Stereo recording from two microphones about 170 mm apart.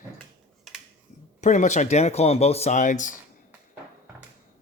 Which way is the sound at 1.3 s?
45° left (ahead or behind).